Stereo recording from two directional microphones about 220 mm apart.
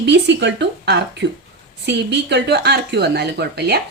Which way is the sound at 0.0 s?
50° right (ahead or behind).